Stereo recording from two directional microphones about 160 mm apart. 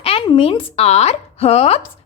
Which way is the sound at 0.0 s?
35° left (ahead or behind).